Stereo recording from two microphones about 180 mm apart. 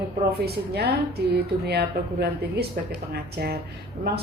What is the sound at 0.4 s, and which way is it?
A woman's voice, 65° right (ahead or behind).